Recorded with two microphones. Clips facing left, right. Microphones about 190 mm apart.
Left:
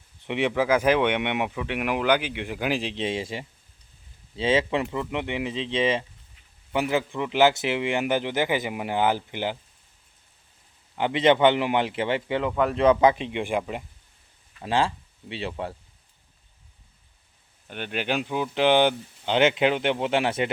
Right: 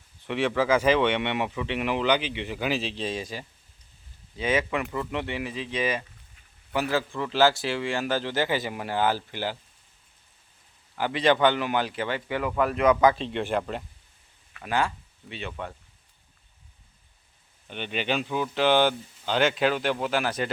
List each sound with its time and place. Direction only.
0.3 s speech: 20° left (ahead or behind)
10.9 s speech: 20° left (ahead or behind)
14.6 s speech: 30° left (ahead or behind)
17.7 s speech: 10° left (ahead or behind); by 20.5 s 25° left (ahead or behind)